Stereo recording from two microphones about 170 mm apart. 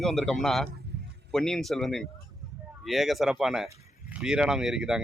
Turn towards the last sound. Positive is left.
turn(degrees=-5)  # may be behind; listen again after turning